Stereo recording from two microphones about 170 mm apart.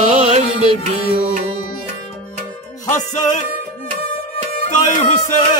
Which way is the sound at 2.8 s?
45° left (ahead or behind).